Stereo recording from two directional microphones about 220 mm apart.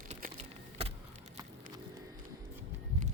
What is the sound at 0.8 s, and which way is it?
Keys jangling, 25° right (ahead or behind).